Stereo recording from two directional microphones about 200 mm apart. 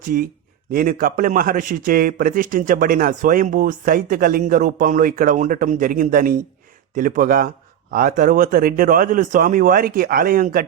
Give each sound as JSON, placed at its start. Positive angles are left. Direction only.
{"t": 0.0, "sound": "a man's voice", "side_deg": -45}